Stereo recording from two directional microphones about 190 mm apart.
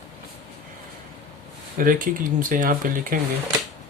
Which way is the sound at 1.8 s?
45° right (ahead or behind).